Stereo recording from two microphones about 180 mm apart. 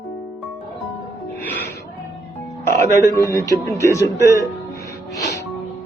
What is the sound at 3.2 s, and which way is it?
Speech, 15° left (ahead or behind).